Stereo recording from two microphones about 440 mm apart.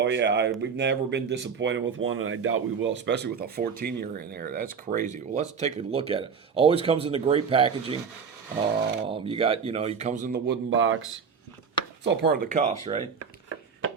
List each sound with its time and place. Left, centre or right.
0.0 s speech: right
9.0 s speech: centre